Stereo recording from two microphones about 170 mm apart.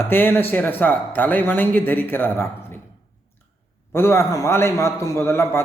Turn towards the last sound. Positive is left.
turn(degrees=15)  # may be behind; listen again after turning